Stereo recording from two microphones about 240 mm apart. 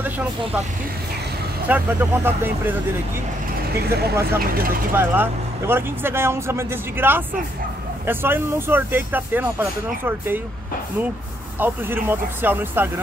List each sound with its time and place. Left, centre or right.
1.7 s speech: centre
3.8 s speech: right
4.9 s speech: centre
11.6 s speech: centre